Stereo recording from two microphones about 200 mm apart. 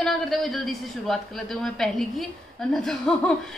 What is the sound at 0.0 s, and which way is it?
A woman's voice, centre (ahead or behind).